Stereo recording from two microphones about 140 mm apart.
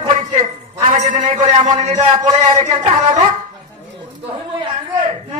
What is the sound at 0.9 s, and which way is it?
A man's voice, 60° right (ahead or behind).